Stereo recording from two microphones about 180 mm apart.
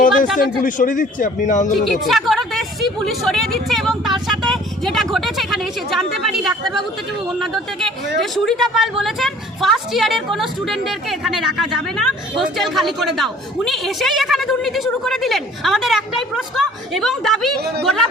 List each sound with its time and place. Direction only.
0.3 s speech: 45° left (ahead or behind)
2.0 s a woman's voice: centre (ahead or behind)
4.3 s vehicle: centre (ahead or behind)
5.1 s a woman's voice: centre (ahead or behind)